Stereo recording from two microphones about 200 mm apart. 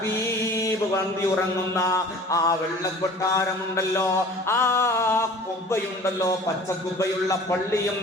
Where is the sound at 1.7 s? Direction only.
15° left (ahead or behind).